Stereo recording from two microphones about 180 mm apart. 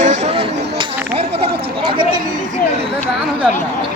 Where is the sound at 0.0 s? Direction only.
40° right (ahead or behind).